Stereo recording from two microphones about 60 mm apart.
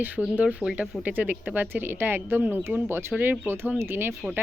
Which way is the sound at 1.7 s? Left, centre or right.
Right.